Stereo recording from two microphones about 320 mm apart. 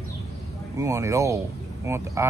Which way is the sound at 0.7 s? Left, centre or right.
Centre.